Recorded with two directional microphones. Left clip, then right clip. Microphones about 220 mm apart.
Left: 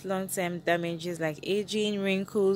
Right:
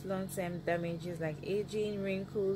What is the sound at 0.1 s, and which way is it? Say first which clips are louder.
Speech: left 7 dB; 45° left (ahead or behind).